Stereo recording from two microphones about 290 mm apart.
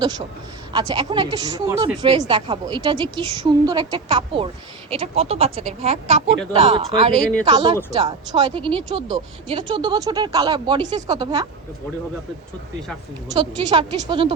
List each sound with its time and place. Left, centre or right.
0.7 s speech: centre
7.1 s speech: centre
7.4 s speech: centre
13.3 s speech: centre